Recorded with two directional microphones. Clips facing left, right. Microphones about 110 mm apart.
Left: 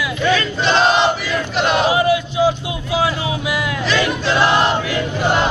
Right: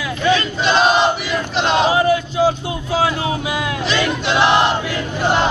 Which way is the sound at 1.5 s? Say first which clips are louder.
Right 1 dB; 25° right (ahead or behind).